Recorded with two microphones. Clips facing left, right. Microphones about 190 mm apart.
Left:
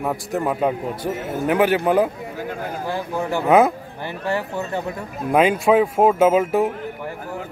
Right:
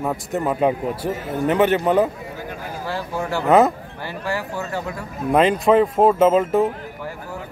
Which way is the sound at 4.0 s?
20° left (ahead or behind).